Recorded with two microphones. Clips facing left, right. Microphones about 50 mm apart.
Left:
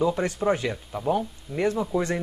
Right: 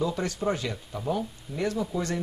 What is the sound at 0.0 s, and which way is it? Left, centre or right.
Speech, left.